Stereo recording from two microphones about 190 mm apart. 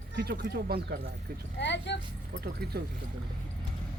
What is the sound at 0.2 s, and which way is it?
Speech, 55° right (ahead or behind).